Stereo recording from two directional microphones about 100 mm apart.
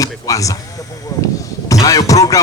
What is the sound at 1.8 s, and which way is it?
Speech, 35° left (ahead or behind).